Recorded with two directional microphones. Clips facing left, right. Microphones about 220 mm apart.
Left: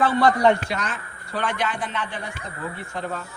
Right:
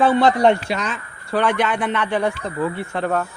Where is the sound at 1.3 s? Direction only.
70° right (ahead or behind).